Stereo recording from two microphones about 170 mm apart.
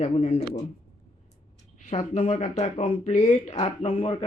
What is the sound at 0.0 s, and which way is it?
Speech, 40° left (ahead or behind).